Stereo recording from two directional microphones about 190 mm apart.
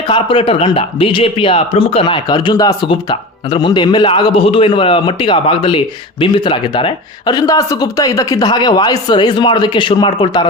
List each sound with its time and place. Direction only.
0.1 s a man's voice: 30° left (ahead or behind)